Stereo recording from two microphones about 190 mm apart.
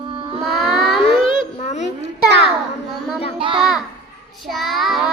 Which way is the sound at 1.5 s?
35° left (ahead or behind).